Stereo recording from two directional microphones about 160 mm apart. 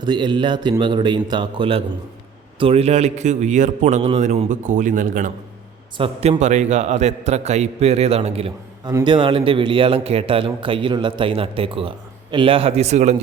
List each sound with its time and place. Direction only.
0.0 s a man's voice: 30° right (ahead or behind); by 5.3 s 55° right (ahead or behind)
6.0 s a man's voice: 40° right (ahead or behind)